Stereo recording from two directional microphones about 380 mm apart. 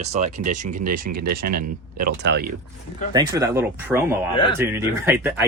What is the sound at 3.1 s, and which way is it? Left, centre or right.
Speech, centre.